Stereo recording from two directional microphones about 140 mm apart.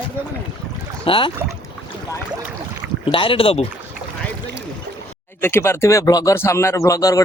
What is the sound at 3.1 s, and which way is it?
Speech, 40° left (ahead or behind).